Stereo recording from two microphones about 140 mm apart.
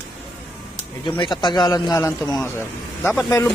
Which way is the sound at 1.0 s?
35° left (ahead or behind).